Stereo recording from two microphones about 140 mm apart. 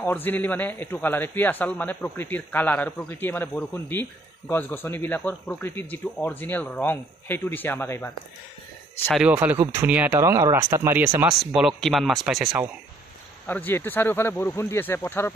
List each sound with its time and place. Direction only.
0.0 s a man's voice: 15° left (ahead or behind)
9.1 s speech: 10° right (ahead or behind)
11.2 s speech: 5° right (ahead or behind)
13.5 s a man's voice: 15° left (ahead or behind)